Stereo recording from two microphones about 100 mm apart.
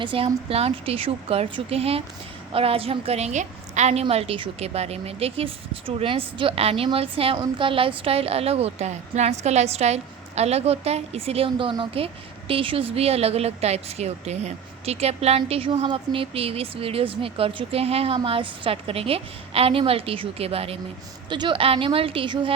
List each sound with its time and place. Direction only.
0.0 s a woman's voice: 60° right (ahead or behind)
0.4 s a woman's voice: 80° right
4.1 s a woman's voice: 80° right
15.9 s a woman's voice: 65° right (ahead or behind); by 18.2 s 80° right
18.3 s a woman's voice: 65° right (ahead or behind)
21.2 s a woman's voice: 50° right (ahead or behind)